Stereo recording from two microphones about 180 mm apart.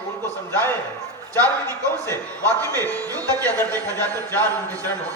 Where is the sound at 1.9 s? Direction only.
20° right (ahead or behind).